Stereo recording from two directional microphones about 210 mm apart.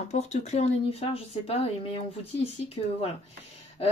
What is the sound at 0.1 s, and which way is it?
Speech, 30° left (ahead or behind).